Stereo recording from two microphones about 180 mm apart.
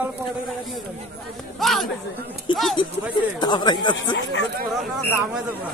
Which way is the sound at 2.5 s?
25° left (ahead or behind).